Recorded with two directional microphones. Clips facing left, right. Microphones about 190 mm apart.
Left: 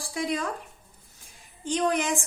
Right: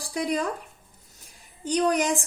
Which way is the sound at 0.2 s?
40° right (ahead or behind).